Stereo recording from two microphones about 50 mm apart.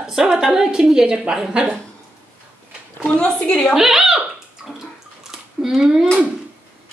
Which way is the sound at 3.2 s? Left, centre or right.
Centre.